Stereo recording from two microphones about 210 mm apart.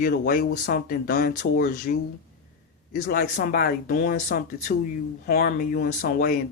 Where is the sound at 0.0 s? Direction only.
45° left (ahead or behind).